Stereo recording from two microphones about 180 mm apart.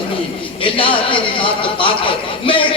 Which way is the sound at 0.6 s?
30° left (ahead or behind).